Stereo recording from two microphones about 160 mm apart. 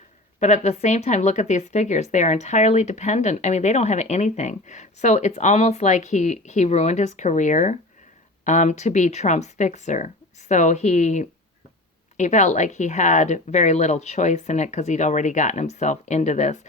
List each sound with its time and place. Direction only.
0.3 s speech: 45° left (ahead or behind)